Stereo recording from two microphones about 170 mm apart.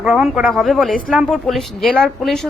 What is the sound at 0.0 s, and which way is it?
A woman's voice, 5° right (ahead or behind).